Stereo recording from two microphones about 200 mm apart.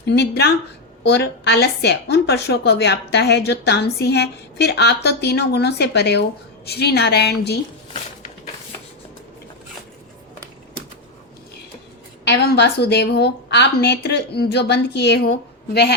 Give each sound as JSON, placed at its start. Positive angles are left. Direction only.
{"t": 0.0, "sound": "a woman's voice", "side_deg": 55}
{"t": 12.3, "sound": "a woman's voice", "side_deg": 55}